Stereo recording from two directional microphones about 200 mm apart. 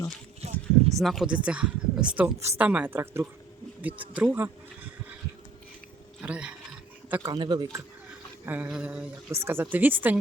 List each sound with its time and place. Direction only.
0.4 s a sound: 30° right (ahead or behind)
0.9 s speech: centre (ahead or behind)
6.2 s speech: 5° right (ahead or behind)
7.1 s speech: 15° right (ahead or behind)
8.4 s speech: 10° right (ahead or behind)